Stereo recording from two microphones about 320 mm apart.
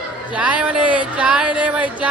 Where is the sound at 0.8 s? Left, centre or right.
Centre.